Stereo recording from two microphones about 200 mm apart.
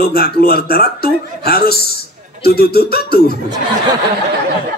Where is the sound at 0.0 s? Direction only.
50° left (ahead or behind).